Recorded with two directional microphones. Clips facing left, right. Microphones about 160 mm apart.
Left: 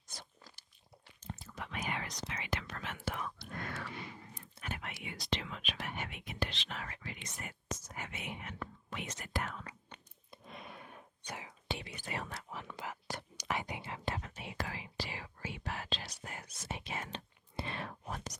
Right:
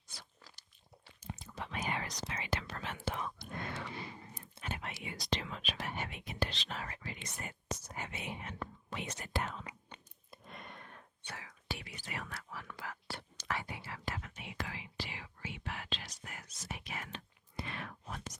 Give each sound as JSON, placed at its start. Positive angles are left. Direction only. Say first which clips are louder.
{"t": 1.2, "sound": "whispering", "louder": "even", "side_deg": -10}
{"t": 1.5, "sound": "whispering", "louder": "right 1 dB", "side_deg": -30}
{"t": 10.3, "sound": "a sound", "louder": "left 1 dB", "side_deg": 0}
{"t": 11.4, "sound": "whispering", "louder": "left 2 dB", "side_deg": 25}